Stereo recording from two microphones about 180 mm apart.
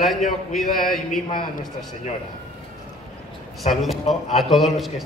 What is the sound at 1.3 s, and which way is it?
Speech, 50° left (ahead or behind).